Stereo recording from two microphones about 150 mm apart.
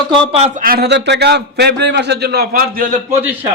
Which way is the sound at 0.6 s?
80° right.